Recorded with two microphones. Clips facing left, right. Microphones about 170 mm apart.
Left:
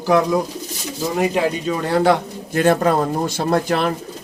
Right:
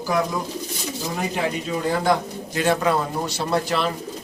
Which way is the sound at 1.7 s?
70° left (ahead or behind).